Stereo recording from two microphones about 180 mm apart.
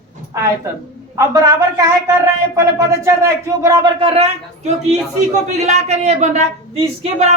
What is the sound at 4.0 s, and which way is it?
A woman's voice, 35° right (ahead or behind).